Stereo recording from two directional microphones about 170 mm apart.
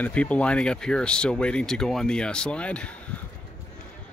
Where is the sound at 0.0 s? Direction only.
10° left (ahead or behind).